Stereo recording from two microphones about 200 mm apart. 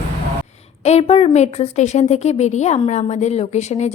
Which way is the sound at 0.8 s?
30° left (ahead or behind).